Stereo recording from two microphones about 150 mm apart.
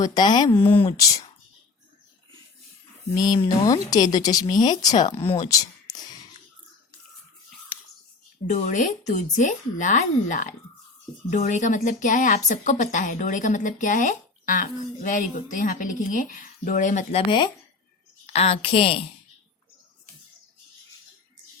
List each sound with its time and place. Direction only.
0.0 s speech: 25° left (ahead or behind)
3.2 s speech: 30° left (ahead or behind)
5.1 s a woman's voice: 35° left (ahead or behind)
5.5 s a sound: 25° left (ahead or behind)
8.4 s a woman's voice: 50° left (ahead or behind); by 19.0 s 35° left (ahead or behind)